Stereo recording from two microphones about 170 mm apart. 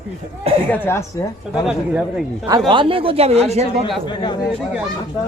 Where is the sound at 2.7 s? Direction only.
30° right (ahead or behind).